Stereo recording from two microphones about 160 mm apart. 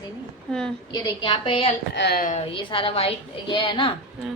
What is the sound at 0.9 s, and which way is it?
Speech, 30° left (ahead or behind).